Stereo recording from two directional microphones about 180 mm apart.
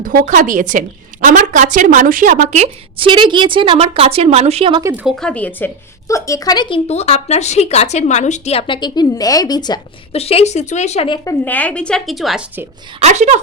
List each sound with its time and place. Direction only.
0.0 s a woman's voice: 45° right (ahead or behind)
3.1 s speech: 25° right (ahead or behind)
4.8 s speech: 10° right (ahead or behind)
5.2 s a woman's voice: 10° left (ahead or behind); by 11.2 s 35° left (ahead or behind)
11.3 s a woman's voice: 10° left (ahead or behind)
13.0 s speech: 40° right (ahead or behind)